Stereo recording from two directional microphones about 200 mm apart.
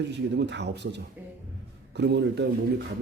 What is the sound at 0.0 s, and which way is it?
A man's voice, 60° right (ahead or behind).